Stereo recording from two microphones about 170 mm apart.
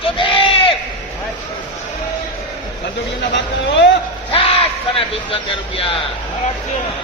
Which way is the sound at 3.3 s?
90° left.